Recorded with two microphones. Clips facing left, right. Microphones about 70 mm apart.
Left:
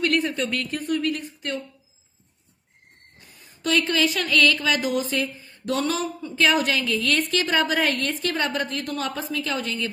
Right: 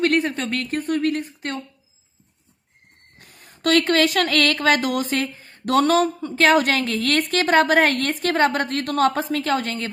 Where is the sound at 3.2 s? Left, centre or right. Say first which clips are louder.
Right 5 dB; right.